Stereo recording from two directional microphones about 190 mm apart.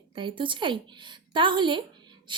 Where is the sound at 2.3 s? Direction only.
25° right (ahead or behind).